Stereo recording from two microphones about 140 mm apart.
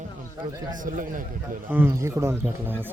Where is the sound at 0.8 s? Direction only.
75° right (ahead or behind).